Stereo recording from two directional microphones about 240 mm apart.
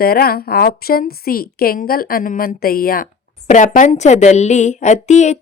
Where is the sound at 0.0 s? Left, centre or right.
Left.